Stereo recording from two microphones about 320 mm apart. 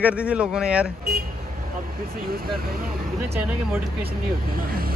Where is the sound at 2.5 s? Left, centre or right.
Right.